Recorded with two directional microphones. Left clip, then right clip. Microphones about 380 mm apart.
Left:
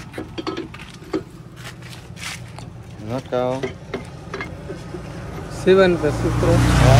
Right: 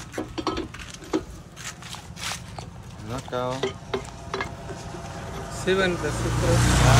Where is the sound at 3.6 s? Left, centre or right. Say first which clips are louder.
Even; right.